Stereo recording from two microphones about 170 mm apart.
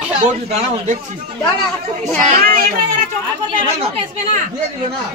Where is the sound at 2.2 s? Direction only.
55° right (ahead or behind).